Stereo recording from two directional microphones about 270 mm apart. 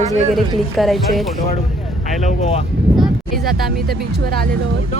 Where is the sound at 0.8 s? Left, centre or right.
Centre.